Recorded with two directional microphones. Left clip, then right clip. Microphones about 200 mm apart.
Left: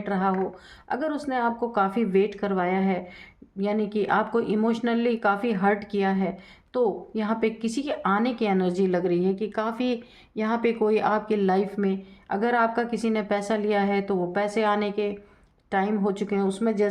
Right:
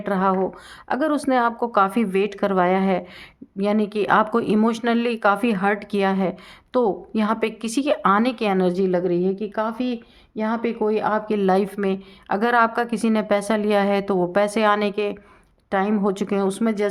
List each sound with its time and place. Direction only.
0.0 s speech: 35° right (ahead or behind); by 11.3 s 20° right (ahead or behind)
11.3 s speech: 35° right (ahead or behind)